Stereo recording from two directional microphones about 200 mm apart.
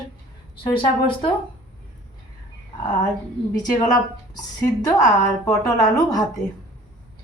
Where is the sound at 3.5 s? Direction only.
20° left (ahead or behind).